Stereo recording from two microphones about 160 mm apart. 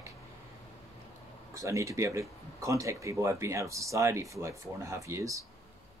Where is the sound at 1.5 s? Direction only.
20° right (ahead or behind).